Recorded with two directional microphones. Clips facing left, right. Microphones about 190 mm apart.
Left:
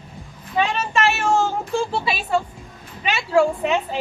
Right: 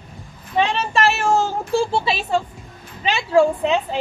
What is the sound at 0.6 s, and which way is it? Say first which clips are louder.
A woman's voice: right 2 dB; 30° right (ahead or behind).